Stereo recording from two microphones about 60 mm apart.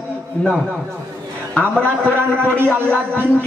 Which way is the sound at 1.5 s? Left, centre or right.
Centre.